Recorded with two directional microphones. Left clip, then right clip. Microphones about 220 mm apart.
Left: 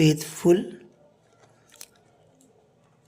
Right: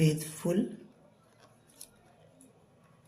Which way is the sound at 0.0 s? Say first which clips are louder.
Left 10 dB; 50° left (ahead or behind).